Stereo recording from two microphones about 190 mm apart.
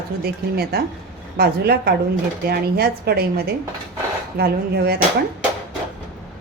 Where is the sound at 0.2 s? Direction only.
55° right (ahead or behind).